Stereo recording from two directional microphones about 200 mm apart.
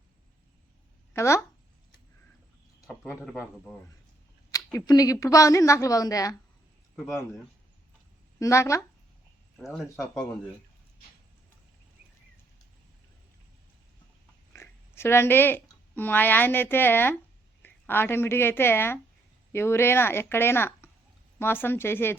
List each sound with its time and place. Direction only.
1.1 s speech: 15° left (ahead or behind)
2.8 s speech: centre (ahead or behind)
4.5 s a woman's voice: 15° left (ahead or behind)
6.9 s speech: centre (ahead or behind)
8.4 s a woman's voice: 15° left (ahead or behind)
14.5 s a woman's voice: 10° left (ahead or behind)